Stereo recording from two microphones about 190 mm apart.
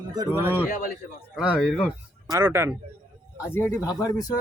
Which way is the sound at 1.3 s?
Centre (ahead or behind).